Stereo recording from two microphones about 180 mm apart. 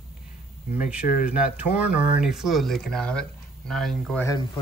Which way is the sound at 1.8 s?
5° right (ahead or behind).